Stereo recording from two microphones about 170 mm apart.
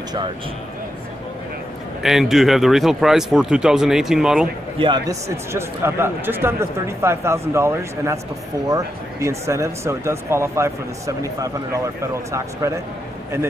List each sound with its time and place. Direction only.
2.0 s speech: centre (ahead or behind)
4.7 s speech: 25° right (ahead or behind)